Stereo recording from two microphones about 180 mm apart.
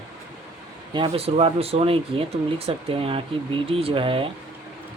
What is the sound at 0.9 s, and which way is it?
Speech, 30° right (ahead or behind).